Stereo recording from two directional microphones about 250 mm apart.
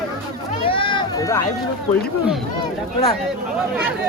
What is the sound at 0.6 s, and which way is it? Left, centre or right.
Run, centre.